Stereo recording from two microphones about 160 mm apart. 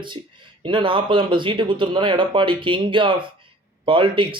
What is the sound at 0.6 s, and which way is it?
Speech, 30° right (ahead or behind).